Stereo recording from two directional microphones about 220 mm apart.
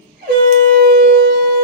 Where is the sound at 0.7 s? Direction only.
45° right (ahead or behind).